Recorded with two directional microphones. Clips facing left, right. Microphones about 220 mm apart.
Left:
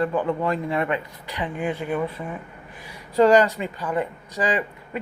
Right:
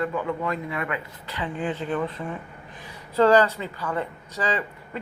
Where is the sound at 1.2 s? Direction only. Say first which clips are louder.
Left 1 dB; 15° left (ahead or behind).